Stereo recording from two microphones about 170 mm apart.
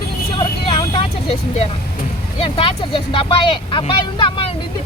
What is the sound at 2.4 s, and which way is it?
Speech, 30° left (ahead or behind).